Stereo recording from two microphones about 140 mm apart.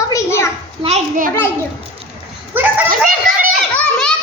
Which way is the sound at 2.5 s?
15° right (ahead or behind).